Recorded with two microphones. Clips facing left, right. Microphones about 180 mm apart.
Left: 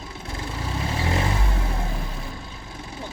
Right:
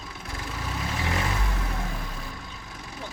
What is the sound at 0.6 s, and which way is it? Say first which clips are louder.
Vehicle: left 4 dB; 30° left (ahead or behind).